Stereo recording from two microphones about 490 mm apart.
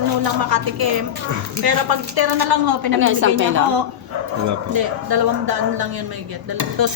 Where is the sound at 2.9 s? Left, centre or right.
Right.